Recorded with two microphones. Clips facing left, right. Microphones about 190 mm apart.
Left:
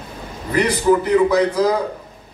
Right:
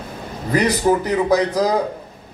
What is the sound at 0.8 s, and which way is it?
Speech, 40° right (ahead or behind).